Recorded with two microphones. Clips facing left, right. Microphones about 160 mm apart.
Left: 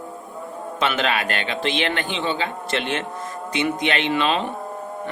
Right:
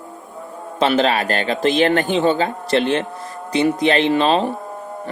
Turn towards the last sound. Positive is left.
turn(degrees=-35)  # may be behind; listen again after turning